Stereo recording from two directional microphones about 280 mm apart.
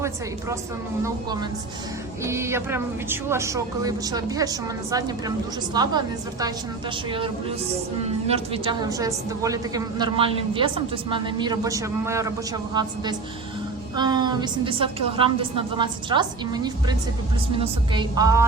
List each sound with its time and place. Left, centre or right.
1.0 s a woman's voice: centre
8.3 s a woman's voice: centre
13.9 s a woman's voice: centre